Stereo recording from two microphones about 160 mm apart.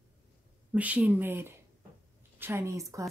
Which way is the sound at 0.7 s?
10° right (ahead or behind).